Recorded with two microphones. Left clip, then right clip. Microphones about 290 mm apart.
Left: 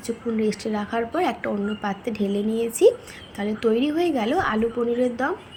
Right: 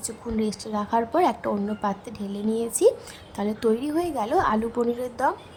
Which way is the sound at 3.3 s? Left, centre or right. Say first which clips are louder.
Left 2 dB; centre.